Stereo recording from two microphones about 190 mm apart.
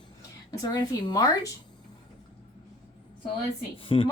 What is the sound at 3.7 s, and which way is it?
Speech, 30° left (ahead or behind).